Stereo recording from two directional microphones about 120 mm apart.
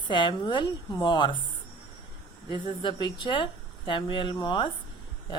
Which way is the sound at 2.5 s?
40° left (ahead or behind).